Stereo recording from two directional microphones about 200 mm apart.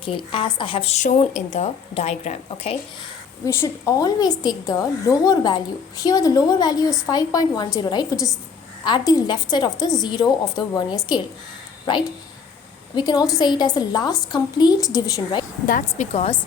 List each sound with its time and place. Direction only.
0.0 s speech: 25° left (ahead or behind)
3.4 s a woman's voice: 15° left (ahead or behind)
13.0 s a woman's voice: 20° left (ahead or behind)
15.6 s speech: 40° left (ahead or behind)